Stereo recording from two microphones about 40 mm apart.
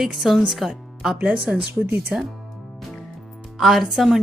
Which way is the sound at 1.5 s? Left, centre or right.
Right.